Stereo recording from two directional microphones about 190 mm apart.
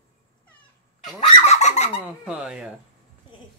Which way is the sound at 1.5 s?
35° left (ahead or behind).